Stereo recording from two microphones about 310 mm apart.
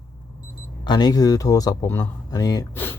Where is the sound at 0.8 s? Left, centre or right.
Centre.